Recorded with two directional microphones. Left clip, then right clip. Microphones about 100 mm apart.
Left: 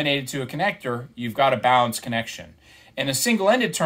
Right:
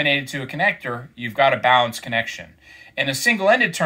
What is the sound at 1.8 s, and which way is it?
Speech, 55° left (ahead or behind).